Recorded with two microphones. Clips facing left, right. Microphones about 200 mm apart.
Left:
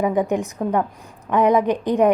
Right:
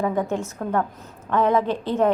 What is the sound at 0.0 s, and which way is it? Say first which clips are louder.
A woman's voice: left 4 dB; 15° left (ahead or behind).